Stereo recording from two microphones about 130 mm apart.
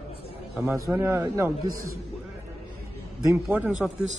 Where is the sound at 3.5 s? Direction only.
10° right (ahead or behind).